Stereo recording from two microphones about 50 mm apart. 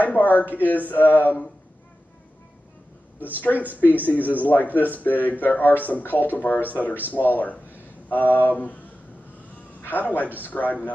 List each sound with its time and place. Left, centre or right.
0.0 s speech: left
4.0 s speech: left
9.8 s a man's voice: left